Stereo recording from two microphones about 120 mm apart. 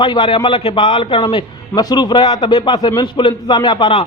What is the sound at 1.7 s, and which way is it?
A man's voice, 35° left (ahead or behind).